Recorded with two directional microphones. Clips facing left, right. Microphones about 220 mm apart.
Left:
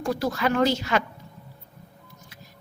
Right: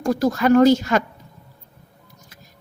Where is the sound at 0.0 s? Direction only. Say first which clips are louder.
Right 6 dB; 45° right (ahead or behind).